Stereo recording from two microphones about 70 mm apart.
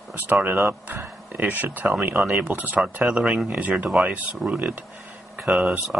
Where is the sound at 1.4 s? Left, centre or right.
Right.